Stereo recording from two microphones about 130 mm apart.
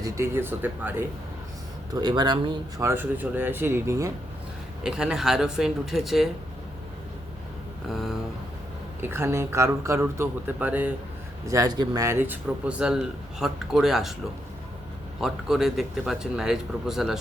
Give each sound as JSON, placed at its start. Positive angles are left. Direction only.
{"t": 0.0, "sound": "speech", "side_deg": -20}
{"t": 1.9, "sound": "speech", "side_deg": -30}
{"t": 2.8, "sound": "speech", "side_deg": -15}
{"t": 4.8, "sound": "speech", "side_deg": -5}
{"t": 9.0, "sound": "speech", "side_deg": -15}
{"t": 11.4, "sound": "speech", "side_deg": -25}
{"t": 12.2, "sound": "speech", "side_deg": -10}
{"t": 15.2, "sound": "speech", "side_deg": -5}